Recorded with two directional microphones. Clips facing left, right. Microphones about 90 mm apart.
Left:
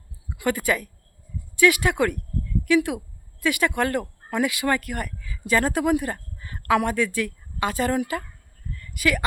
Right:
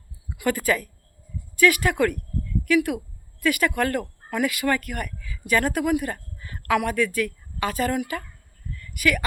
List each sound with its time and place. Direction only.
0.3 s a woman's voice: 20° left (ahead or behind)